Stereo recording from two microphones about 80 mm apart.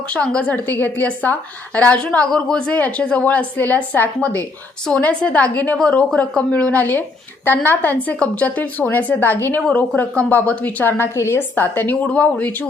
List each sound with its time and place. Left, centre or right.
0.1 s a woman's voice: centre